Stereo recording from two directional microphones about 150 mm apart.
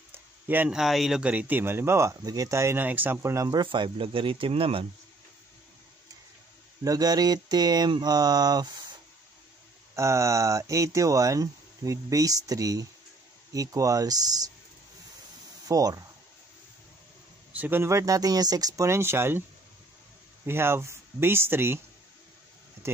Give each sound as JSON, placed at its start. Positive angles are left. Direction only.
{"t": 0.1, "sound": "a sound", "side_deg": -15}
{"t": 0.7, "sound": "speech", "side_deg": 0}
{"t": 6.8, "sound": "speech", "side_deg": -25}
{"t": 9.9, "sound": "speech", "side_deg": -20}
{"t": 15.7, "sound": "speech", "side_deg": -25}
{"t": 17.5, "sound": "speech", "side_deg": -10}
{"t": 20.4, "sound": "speech", "side_deg": -15}